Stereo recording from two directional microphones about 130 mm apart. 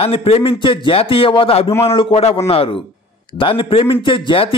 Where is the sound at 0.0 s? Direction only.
45° left (ahead or behind).